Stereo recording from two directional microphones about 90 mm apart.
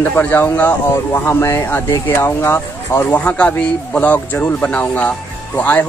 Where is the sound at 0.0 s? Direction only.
20° left (ahead or behind).